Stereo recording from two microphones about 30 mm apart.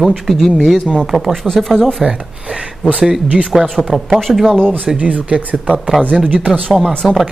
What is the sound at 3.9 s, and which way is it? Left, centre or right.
Speech, centre.